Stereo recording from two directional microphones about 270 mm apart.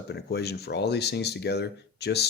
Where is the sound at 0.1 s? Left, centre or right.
Left.